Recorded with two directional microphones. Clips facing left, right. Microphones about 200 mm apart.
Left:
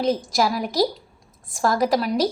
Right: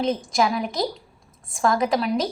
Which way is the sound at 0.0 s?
Centre (ahead or behind).